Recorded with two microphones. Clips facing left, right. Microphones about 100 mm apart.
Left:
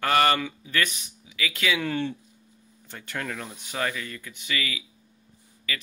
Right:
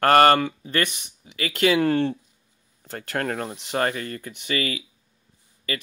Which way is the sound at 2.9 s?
50° right (ahead or behind).